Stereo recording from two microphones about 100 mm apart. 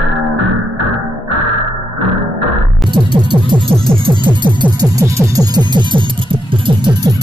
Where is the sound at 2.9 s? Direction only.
50° right (ahead or behind).